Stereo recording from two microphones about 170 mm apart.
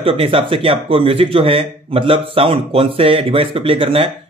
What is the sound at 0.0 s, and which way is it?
Speech, 30° right (ahead or behind).